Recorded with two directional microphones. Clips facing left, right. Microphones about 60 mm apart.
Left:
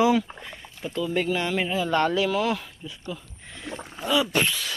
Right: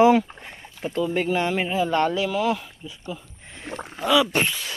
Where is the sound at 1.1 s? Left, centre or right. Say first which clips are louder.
Even; right.